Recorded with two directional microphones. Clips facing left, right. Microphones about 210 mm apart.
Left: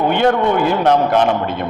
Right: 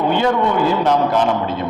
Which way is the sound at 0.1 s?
60° left (ahead or behind).